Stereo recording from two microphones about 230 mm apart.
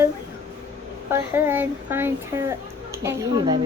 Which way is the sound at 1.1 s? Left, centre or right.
Centre.